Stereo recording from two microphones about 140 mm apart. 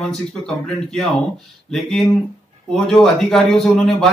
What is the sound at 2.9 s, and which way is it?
Speech, 5° left (ahead or behind).